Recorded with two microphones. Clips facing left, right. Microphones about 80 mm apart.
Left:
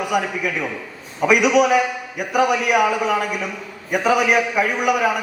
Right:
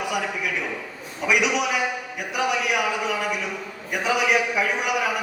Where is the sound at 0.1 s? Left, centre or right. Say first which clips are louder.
Left 5 dB; left.